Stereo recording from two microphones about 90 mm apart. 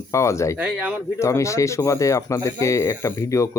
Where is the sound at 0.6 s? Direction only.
15° right (ahead or behind).